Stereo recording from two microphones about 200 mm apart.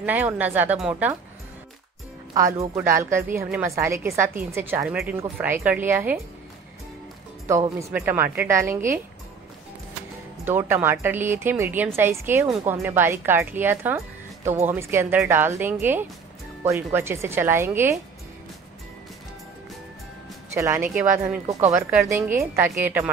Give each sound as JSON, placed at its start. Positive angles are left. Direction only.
{"t": 0.0, "sound": "speech", "side_deg": -10}
{"t": 2.3, "sound": "speech", "side_deg": -15}
{"t": 7.4, "sound": "speech", "side_deg": -15}
{"t": 10.4, "sound": "speech", "side_deg": -10}
{"t": 12.4, "sound": "a woman's voice", "side_deg": 0}
{"t": 12.7, "sound": "speech", "side_deg": -10}
{"t": 20.5, "sound": "speech", "side_deg": -15}